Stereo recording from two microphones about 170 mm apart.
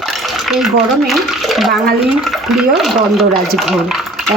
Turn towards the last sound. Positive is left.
turn(degrees=0)  # may be behind; listen again after turning